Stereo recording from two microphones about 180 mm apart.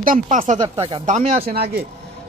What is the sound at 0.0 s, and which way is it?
Speech, 50° right (ahead or behind).